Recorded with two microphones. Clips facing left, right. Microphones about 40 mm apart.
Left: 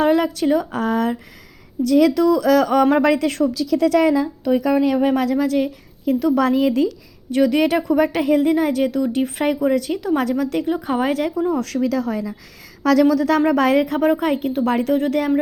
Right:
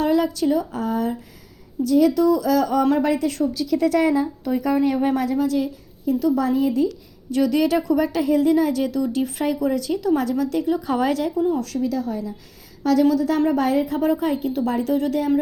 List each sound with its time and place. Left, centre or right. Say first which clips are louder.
0.0 s a woman's voice: left 2 dB; left
3.8 s a woman's voice: left 3 dB; left
7.3 s speech: left 2 dB; left
10.9 s speech: left 1 dB; left
11.2 s a woman's voice: left 1 dB; left
14.9 s speech: left 3 dB; left